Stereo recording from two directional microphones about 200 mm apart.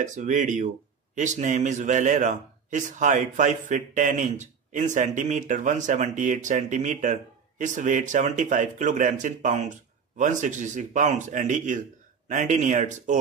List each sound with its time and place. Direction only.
0.0 s a man's voice: 40° right (ahead or behind)